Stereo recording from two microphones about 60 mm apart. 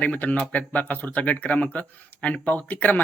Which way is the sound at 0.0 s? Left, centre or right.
Left.